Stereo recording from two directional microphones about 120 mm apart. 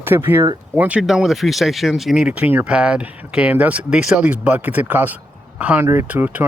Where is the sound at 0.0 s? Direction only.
20° right (ahead or behind).